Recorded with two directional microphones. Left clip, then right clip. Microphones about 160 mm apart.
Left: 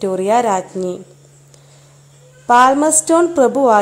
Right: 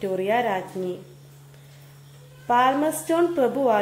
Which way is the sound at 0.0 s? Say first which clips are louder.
Left 8 dB; 45° left (ahead or behind).